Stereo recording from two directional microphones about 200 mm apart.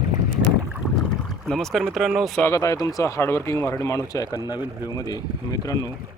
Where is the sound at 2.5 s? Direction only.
15° left (ahead or behind).